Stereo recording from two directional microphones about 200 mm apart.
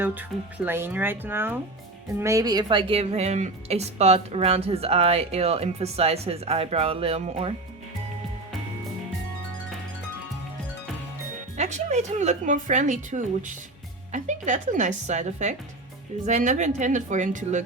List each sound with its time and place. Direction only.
0.0 s a woman's voice: 10° right (ahead or behind); by 7.5 s 30° right (ahead or behind)
11.5 s a woman's voice: 35° right (ahead or behind)